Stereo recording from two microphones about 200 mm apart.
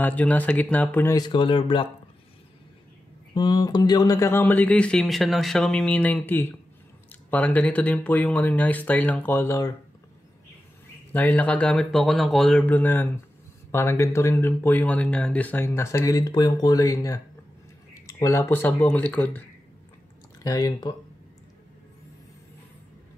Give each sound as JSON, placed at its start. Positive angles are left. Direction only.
{"t": 0.0, "sound": "speech", "side_deg": 5}
{"t": 3.3, "sound": "speech", "side_deg": 20}
{"t": 11.1, "sound": "speech", "side_deg": 10}
{"t": 20.4, "sound": "speech", "side_deg": 20}